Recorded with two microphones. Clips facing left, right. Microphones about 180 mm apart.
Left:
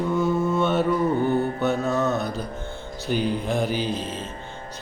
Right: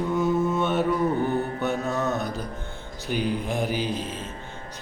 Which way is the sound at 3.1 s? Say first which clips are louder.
Left 2 dB; 5° right (ahead or behind).